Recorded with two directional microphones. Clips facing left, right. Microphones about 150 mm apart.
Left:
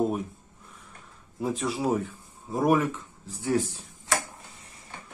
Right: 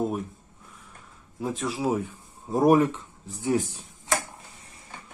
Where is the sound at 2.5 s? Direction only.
35° right (ahead or behind).